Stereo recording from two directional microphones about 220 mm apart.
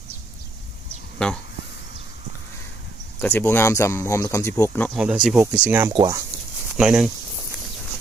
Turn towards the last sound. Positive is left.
turn(degrees=-5)  # may be behind; listen again after turning